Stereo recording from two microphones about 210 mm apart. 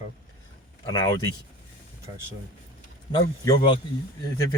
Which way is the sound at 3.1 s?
20° left (ahead or behind).